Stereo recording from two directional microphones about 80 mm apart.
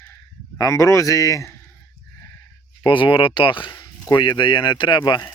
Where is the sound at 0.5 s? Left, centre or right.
Left.